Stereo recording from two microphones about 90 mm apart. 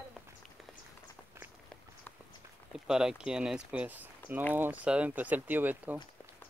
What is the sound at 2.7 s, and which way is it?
Speech, 5° right (ahead or behind).